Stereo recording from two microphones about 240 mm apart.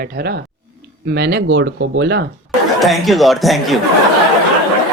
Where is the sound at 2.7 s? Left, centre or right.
Centre.